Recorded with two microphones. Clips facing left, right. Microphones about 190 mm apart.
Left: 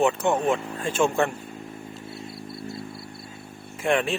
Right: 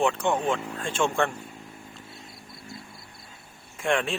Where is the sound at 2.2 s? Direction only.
35° left (ahead or behind).